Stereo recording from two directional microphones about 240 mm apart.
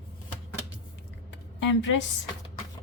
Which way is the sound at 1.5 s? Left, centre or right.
Left.